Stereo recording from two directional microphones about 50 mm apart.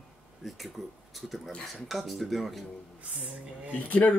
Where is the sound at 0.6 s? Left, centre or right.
Centre.